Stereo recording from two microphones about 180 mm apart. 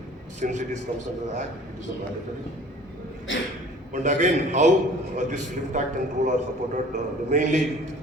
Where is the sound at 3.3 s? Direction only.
90° left.